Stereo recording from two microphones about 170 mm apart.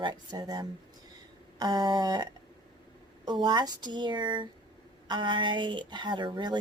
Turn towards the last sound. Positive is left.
turn(degrees=-25)  # may be behind; listen again after turning